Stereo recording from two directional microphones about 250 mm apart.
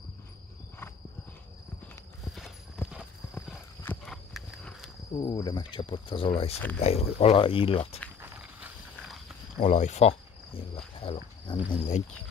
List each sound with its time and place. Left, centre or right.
2.2 s clip-clop: centre
5.1 s speech: left
8.2 s walk: centre
9.6 s speech: left